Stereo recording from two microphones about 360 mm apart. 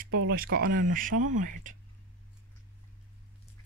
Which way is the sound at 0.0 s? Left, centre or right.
Right.